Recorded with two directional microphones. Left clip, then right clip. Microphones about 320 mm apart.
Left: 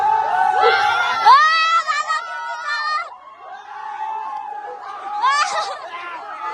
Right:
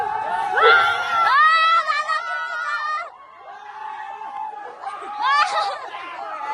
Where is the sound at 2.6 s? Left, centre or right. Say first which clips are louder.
Left 6 dB; centre.